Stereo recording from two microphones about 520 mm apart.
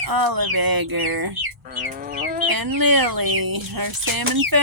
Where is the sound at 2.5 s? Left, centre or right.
Right.